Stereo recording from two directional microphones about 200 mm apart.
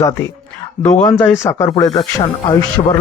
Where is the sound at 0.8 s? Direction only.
20° left (ahead or behind).